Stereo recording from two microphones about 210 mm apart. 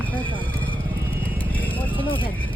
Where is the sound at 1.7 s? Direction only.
25° left (ahead or behind).